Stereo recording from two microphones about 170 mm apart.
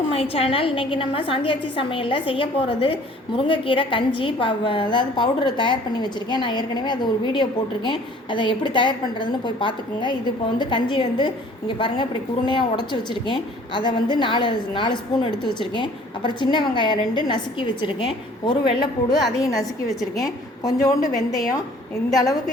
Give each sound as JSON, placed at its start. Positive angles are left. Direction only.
{"t": 0.0, "sound": "a woman's voice", "side_deg": 35}
{"t": 12.5, "sound": "a woman's voice", "side_deg": 25}